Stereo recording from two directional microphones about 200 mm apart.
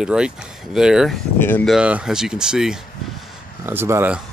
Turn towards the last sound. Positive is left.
turn(degrees=-10)  # may be behind; listen again after turning